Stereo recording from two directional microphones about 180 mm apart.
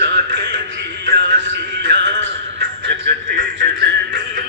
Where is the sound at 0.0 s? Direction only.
75° right (ahead or behind).